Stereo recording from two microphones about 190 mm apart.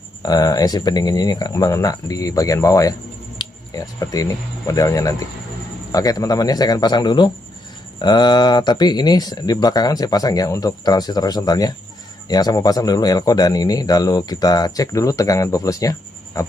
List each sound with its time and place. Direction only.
0.2 s speech: 20° left (ahead or behind)